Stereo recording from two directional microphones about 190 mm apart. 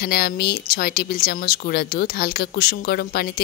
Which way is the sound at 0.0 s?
55° left (ahead or behind).